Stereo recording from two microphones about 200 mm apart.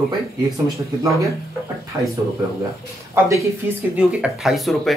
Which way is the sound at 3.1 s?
15° right (ahead or behind).